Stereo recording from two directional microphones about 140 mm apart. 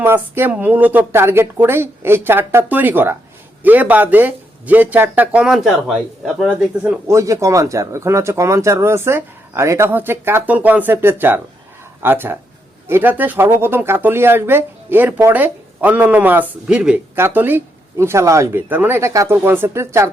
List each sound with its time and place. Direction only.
0.0 s speech: 15° right (ahead or behind)
7.1 s speech: 20° right (ahead or behind)